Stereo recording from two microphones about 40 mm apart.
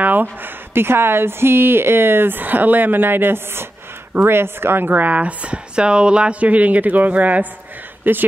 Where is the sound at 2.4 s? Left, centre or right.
Right.